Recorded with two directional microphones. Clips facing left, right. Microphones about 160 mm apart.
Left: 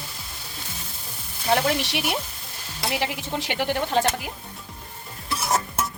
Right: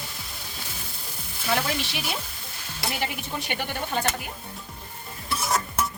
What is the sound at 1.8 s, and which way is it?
Speech, 70° left (ahead or behind).